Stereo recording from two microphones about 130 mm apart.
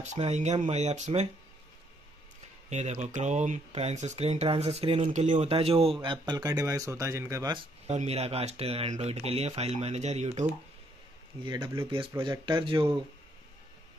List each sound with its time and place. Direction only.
0.0 s speech: 60° right (ahead or behind)
2.7 s speech: 60° right (ahead or behind)
5.5 s speech: 50° right (ahead or behind)
6.0 s speech: 30° right (ahead or behind)
7.9 s speech: 55° right (ahead or behind)
11.4 s a man's voice: 35° right (ahead or behind)